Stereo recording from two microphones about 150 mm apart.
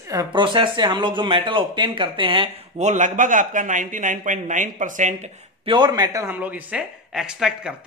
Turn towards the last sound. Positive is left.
turn(degrees=-5)  # may be behind; listen again after turning